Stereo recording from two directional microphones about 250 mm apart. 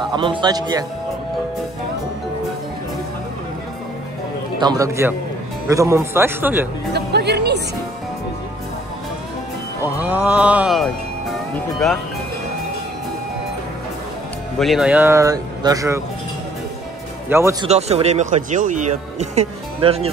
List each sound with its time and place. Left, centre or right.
0.1 s speech: centre
4.6 s speech: centre
6.9 s music: right
9.8 s speech: centre
14.6 s speech: centre
17.3 s speech: centre
17.6 s speech: right